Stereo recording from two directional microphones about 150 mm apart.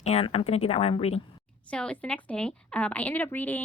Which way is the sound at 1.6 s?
5° left (ahead or behind).